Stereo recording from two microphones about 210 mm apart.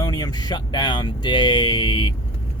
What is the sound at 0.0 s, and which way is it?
Speech, 20° left (ahead or behind).